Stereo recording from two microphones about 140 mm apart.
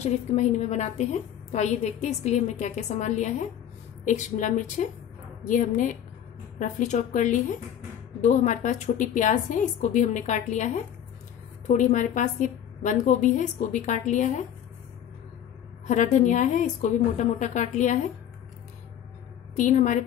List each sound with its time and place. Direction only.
0.0 s a woman's voice: 50° left (ahead or behind)
15.9 s a woman's voice: 60° left (ahead or behind)
19.5 s a woman's voice: 60° left (ahead or behind)